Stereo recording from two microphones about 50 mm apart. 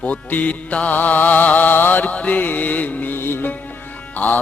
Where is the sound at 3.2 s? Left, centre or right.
Left.